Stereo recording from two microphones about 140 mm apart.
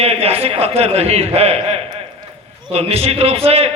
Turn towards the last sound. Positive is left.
turn(degrees=-45)  # may be behind; listen again after turning